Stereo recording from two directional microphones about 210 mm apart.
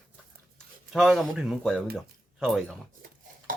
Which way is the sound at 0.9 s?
Centre (ahead or behind).